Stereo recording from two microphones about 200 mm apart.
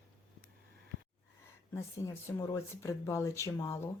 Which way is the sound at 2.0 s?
15° left (ahead or behind).